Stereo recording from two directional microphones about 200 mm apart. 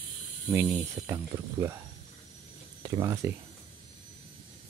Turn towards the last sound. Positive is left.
turn(degrees=-20)  # may be behind; listen again after turning